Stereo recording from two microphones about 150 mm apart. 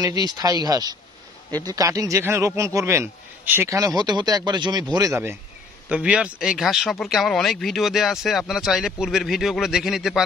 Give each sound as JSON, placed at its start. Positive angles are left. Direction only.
{"t": 0.0, "sound": "a man's voice", "side_deg": -25}